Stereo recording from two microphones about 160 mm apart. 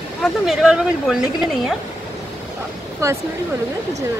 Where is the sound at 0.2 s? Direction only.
5° right (ahead or behind).